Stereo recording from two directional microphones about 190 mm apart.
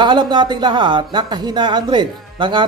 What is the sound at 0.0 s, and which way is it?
Speech, 25° right (ahead or behind).